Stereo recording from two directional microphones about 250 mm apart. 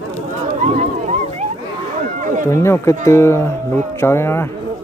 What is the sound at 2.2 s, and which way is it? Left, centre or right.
Run, right.